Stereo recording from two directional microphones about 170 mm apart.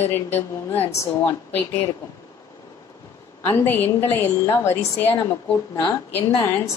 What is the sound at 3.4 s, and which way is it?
A woman's voice, 15° left (ahead or behind).